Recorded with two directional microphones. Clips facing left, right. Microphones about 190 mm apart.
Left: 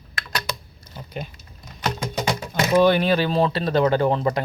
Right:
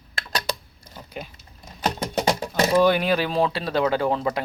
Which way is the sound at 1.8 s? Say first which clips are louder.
Right 2 dB; 35° right (ahead or behind).